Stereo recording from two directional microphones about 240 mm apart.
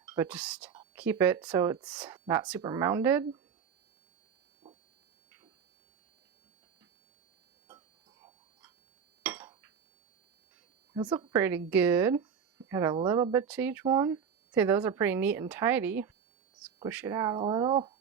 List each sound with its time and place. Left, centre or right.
0.0 s speech: centre
9.2 s chink: centre
10.9 s speech: centre
13.5 s speech: centre